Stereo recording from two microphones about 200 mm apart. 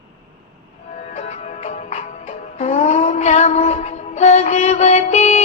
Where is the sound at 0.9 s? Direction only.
35° left (ahead or behind).